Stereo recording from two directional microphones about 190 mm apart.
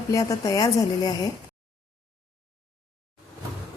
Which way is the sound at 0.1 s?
15° left (ahead or behind).